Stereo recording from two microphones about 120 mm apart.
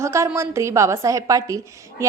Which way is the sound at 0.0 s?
25° right (ahead or behind).